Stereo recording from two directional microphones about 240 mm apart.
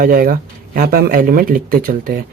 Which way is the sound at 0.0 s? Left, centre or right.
Right.